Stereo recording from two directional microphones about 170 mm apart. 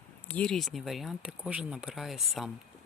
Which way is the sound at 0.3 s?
5° left (ahead or behind).